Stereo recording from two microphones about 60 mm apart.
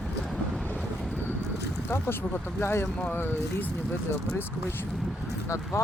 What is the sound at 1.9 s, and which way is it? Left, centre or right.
Speech, left.